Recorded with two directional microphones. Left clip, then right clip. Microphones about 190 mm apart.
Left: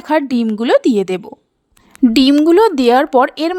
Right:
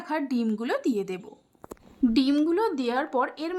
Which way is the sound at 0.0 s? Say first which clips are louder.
Left 13 dB; 40° left (ahead or behind).